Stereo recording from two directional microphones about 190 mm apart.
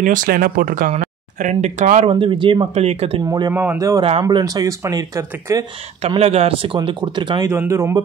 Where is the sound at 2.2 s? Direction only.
25° right (ahead or behind).